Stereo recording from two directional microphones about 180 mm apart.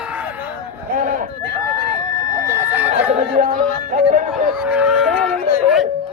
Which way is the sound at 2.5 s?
15° right (ahead or behind).